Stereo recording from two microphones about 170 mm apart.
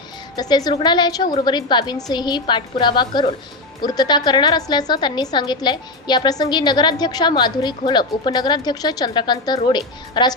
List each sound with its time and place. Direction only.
0.3 s a woman's voice: 25° left (ahead or behind)